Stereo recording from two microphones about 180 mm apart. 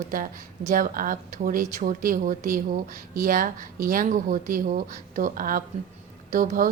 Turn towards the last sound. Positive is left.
turn(degrees=-50)  # may be behind; listen again after turning